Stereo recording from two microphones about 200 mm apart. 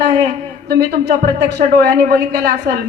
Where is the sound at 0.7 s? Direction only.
55° right (ahead or behind).